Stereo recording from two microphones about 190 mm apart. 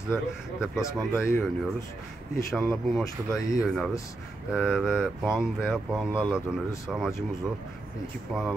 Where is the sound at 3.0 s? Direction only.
20° left (ahead or behind).